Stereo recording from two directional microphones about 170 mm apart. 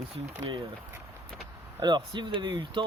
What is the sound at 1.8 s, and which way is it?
Speech, 25° right (ahead or behind).